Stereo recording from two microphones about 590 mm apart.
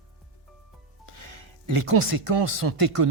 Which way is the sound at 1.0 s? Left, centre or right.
Right.